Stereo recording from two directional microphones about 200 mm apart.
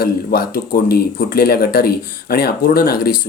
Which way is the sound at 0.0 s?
50° left (ahead or behind).